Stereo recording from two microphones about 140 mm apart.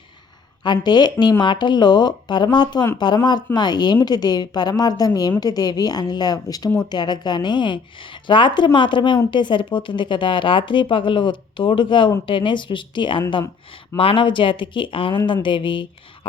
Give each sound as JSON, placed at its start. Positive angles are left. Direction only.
{"t": 0.6, "sound": "speech", "side_deg": 30}